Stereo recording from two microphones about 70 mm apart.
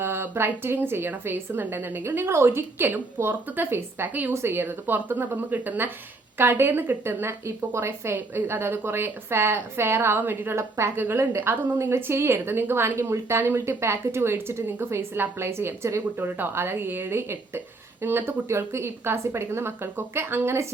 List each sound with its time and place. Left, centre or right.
0.0 s a woman's voice: right
16.1 s a woman's voice: right